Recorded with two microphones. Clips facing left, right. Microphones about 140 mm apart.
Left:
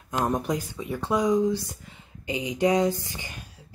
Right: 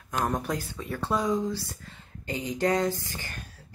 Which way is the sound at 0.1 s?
20° left (ahead or behind).